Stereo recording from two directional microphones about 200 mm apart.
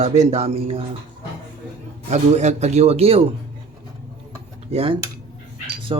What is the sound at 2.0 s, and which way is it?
A man's voice, 35° right (ahead or behind).